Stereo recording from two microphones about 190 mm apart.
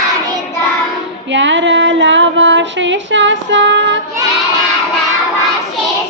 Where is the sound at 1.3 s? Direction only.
75° right (ahead or behind).